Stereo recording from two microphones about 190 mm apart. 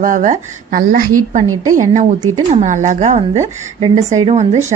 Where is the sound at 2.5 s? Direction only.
40° right (ahead or behind).